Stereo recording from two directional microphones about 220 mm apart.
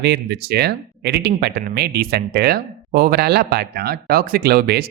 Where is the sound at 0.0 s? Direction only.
50° right (ahead or behind).